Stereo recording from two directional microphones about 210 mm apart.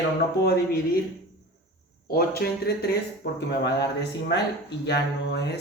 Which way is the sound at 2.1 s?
45° left (ahead or behind).